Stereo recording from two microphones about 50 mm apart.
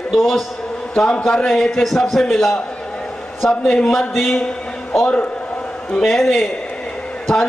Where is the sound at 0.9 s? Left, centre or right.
Centre.